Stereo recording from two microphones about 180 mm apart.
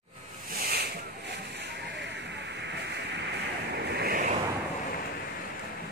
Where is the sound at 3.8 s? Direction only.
60° right (ahead or behind).